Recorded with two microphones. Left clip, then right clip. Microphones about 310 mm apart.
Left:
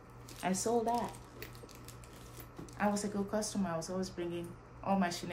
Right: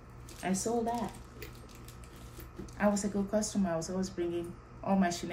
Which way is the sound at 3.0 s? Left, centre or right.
Centre.